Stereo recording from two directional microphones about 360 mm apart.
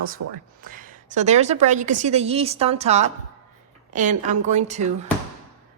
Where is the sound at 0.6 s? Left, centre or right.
Right.